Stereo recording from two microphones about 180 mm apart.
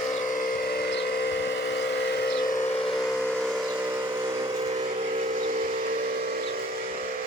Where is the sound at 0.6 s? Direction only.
60° left (ahead or behind).